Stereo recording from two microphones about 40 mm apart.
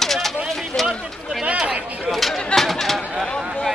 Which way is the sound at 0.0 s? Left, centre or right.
Centre.